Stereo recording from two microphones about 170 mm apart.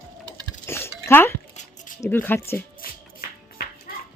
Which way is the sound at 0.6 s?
15° left (ahead or behind).